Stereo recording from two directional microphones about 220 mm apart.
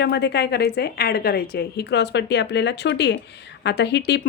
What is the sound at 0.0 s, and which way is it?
A woman's voice, 50° left (ahead or behind).